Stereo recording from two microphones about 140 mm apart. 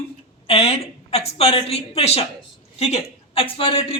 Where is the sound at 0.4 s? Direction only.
45° left (ahead or behind).